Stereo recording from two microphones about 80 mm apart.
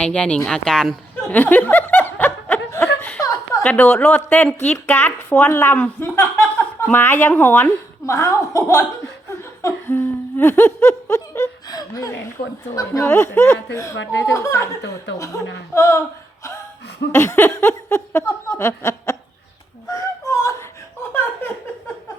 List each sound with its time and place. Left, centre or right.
0.0 s speech: centre
1.1 s snicker: left
3.2 s a sound: left
3.6 s speech: centre
4.9 s speech: left
5.7 s speech: left
8.0 s speech: left
9.9 s humming: left
11.7 s speech: left
17.5 s a sound: left
18.6 s speech: left
19.9 s whimper: left
21.1 s laughter: left